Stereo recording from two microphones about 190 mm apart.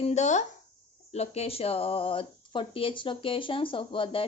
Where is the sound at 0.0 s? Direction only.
35° left (ahead or behind).